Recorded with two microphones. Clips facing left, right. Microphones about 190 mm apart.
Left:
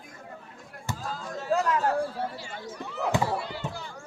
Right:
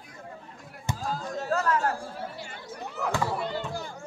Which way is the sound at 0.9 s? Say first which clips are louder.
Right 2 dB; 20° right (ahead or behind).